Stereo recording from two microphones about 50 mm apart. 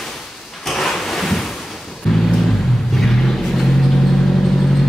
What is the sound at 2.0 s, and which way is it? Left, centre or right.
Music, centre.